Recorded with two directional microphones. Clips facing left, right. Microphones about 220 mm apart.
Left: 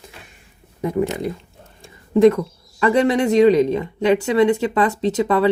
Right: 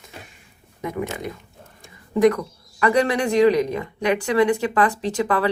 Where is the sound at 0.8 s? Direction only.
30° left (ahead or behind).